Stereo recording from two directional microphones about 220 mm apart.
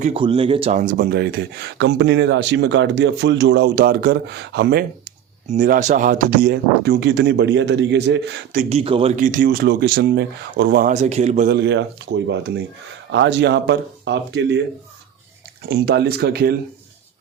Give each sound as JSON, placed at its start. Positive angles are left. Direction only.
{"t": 0.0, "sound": "speech", "side_deg": -25}
{"t": 8.7, "sound": "speech", "side_deg": -25}
{"t": 11.5, "sound": "speech", "side_deg": -55}
{"t": 15.7, "sound": "speech", "side_deg": -45}